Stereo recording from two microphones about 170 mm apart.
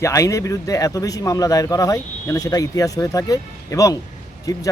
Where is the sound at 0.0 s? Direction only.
20° left (ahead or behind).